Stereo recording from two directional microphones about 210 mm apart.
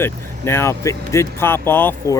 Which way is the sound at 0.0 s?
10° left (ahead or behind).